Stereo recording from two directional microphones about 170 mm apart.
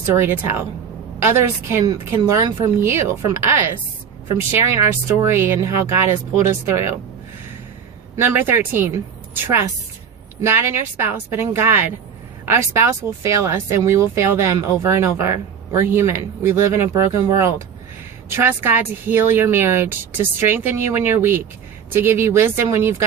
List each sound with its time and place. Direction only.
0.0 s speech: 15° right (ahead or behind)
5.0 s speech: 15° right (ahead or behind)
8.1 s speech: 15° right (ahead or behind)